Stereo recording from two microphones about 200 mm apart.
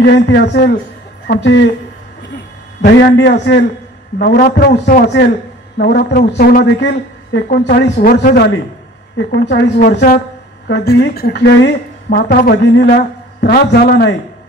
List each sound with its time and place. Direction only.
0.0 s a woman's voice: 55° left (ahead or behind)
2.8 s a woman's voice: 55° left (ahead or behind)
9.8 s a woman's voice: 45° left (ahead or behind)